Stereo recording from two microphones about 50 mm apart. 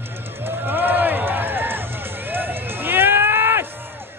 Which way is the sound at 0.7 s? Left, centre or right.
Right.